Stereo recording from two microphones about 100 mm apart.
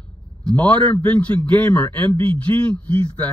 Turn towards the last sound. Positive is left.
turn(degrees=15)  # may be behind; listen again after turning